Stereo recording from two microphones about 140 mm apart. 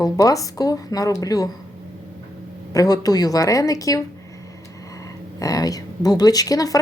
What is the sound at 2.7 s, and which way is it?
Speech, 25° left (ahead or behind).